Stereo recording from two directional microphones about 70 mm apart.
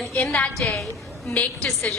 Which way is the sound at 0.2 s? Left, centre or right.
Centre.